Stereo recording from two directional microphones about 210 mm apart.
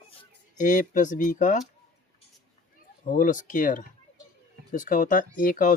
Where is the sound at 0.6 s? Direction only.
35° left (ahead or behind).